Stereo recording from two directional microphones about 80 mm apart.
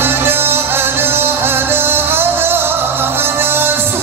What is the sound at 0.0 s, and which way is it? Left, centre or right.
Music, right.